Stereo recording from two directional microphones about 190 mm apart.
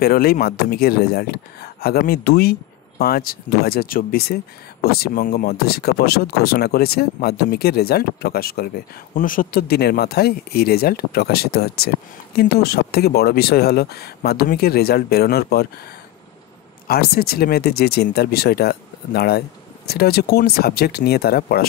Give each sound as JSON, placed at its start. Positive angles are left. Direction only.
{"t": 0.0, "sound": "speech", "side_deg": 50}
{"t": 16.8, "sound": "speech", "side_deg": 55}